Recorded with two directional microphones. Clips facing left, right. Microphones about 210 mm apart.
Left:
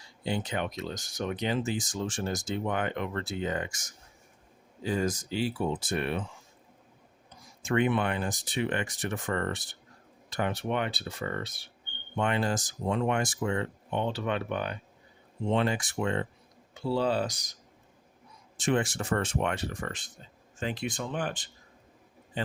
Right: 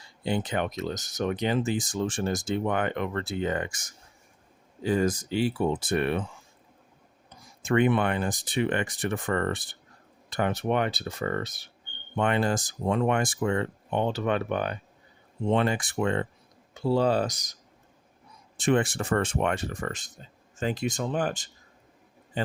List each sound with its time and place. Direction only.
0.3 s speech: 55° right (ahead or behind)
7.6 s speech: 55° right (ahead or behind)
12.1 s speech: 55° right (ahead or behind)
16.8 s speech: 45° right (ahead or behind)
18.5 s speech: 60° right (ahead or behind); by 21.5 s 40° right (ahead or behind)